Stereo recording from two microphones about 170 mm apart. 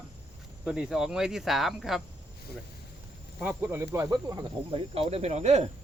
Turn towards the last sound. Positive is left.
turn(degrees=-40)  # may be behind; listen again after turning